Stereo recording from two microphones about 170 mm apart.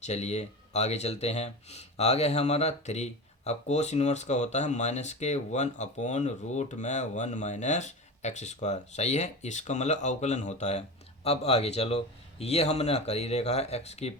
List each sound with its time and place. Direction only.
0.0 s speech: 40° left (ahead or behind)